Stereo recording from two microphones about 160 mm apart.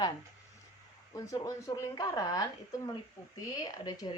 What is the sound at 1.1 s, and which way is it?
Speech, 20° left (ahead or behind).